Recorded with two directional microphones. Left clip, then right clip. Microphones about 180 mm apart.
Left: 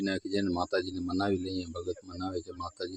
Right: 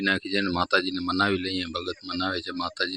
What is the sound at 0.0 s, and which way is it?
Speech, centre (ahead or behind).